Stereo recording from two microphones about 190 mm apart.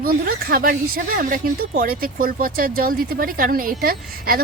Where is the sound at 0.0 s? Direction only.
50° right (ahead or behind).